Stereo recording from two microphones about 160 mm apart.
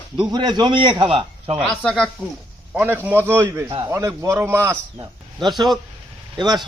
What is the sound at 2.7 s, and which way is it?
A man's voice, 10° right (ahead or behind).